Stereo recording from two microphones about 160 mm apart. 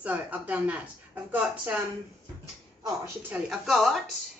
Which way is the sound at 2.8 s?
20° right (ahead or behind).